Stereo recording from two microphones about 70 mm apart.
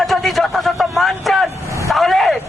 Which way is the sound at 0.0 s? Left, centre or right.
Centre.